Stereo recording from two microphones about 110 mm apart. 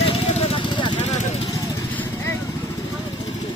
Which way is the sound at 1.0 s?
90° left.